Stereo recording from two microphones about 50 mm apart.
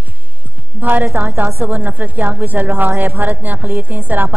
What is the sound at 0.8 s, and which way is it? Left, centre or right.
Music, right.